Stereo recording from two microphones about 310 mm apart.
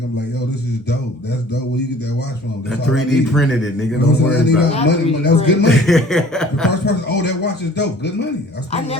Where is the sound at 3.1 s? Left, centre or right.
Centre.